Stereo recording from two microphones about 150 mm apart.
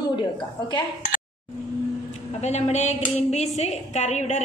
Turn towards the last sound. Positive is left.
turn(degrees=50)  # may be behind; listen again after turning